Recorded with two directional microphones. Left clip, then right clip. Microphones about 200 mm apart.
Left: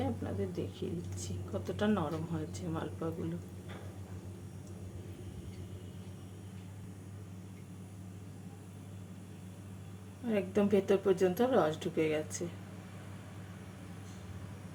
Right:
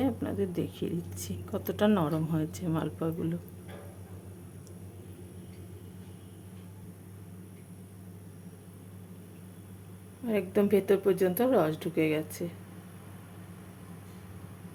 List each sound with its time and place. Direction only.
0.0 s a woman's voice: 40° right (ahead or behind)
10.2 s speech: 30° right (ahead or behind)